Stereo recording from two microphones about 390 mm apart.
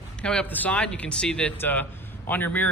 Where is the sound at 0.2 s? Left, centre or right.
Centre.